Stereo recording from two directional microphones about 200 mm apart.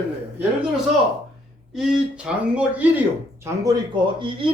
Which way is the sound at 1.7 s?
5° right (ahead or behind).